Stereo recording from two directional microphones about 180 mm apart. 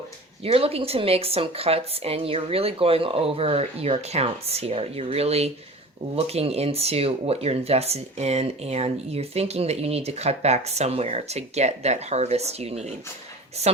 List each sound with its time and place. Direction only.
0.4 s speech: 30° right (ahead or behind)